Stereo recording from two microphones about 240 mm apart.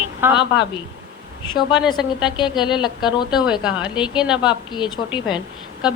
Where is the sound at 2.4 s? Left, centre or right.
Centre.